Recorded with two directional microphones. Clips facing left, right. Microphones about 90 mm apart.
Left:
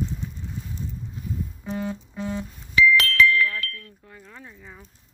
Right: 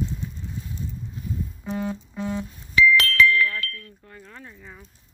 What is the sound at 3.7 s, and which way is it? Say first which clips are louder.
Speech: right 1 dB; 10° left (ahead or behind).